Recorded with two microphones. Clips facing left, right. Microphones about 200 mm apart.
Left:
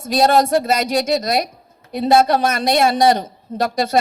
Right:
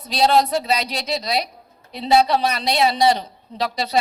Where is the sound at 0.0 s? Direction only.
50° left (ahead or behind).